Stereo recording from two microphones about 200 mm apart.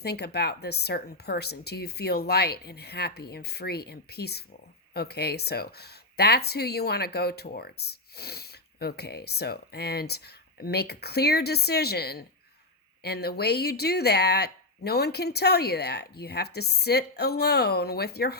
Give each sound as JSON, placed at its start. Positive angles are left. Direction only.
{"t": 0.0, "sound": "speech", "side_deg": 55}